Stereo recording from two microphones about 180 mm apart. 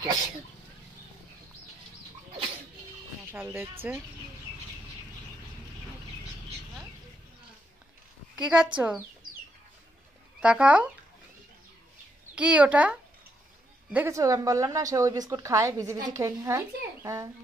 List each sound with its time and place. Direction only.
3.3 s a woman's voice: 10° right (ahead or behind)
8.4 s a woman's voice: 5° right (ahead or behind)
10.4 s a woman's voice: 5° right (ahead or behind)
12.4 s a woman's voice: 5° right (ahead or behind)